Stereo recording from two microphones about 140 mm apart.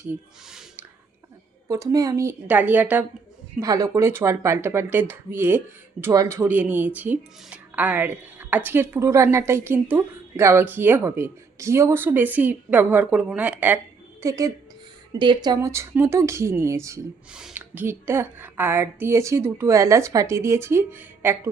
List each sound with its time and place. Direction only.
0.1 s speech: 10° right (ahead or behind)
3.6 s speech: 25° right (ahead or behind)
14.2 s a woman's voice: 20° right (ahead or behind)
15.2 s speech: 30° right (ahead or behind)
17.3 s speech: 10° right (ahead or behind)